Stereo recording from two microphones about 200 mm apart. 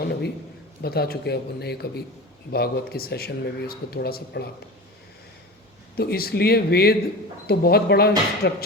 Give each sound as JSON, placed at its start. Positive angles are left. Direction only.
{"t": 0.0, "sound": "a sound", "side_deg": 55}
{"t": 0.8, "sound": "speech", "side_deg": 50}
{"t": 6.0, "sound": "speech", "side_deg": 50}